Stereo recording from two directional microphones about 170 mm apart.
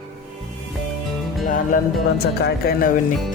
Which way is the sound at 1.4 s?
50° left (ahead or behind).